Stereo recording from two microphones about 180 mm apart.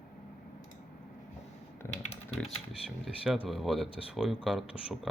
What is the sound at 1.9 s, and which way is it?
Typing, 35° left (ahead or behind).